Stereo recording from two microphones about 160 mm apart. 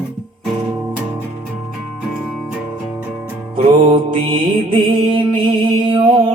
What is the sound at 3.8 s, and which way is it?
Mantra, 35° right (ahead or behind).